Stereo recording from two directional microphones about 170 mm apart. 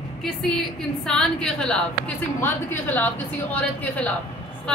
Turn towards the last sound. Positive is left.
turn(degrees=10)  # may be behind; listen again after turning